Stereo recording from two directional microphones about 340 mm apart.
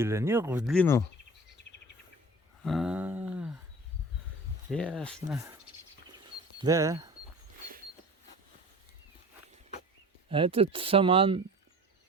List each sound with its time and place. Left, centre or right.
0.0 s speech: centre
2.6 s a sound: centre
4.7 s speech: centre
6.6 s speech: centre
10.2 s speech: centre